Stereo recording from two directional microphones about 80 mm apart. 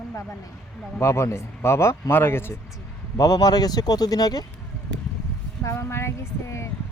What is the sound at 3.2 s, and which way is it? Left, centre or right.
Speech, left.